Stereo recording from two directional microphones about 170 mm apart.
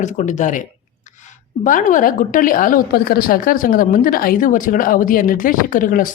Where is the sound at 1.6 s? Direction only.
50° left (ahead or behind).